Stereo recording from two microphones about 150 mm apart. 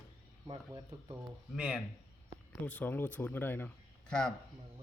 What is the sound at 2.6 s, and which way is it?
A man's voice, 10° left (ahead or behind).